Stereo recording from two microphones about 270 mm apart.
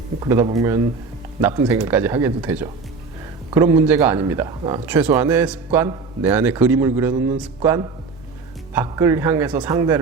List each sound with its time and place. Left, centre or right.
0.2 s a man's voice: centre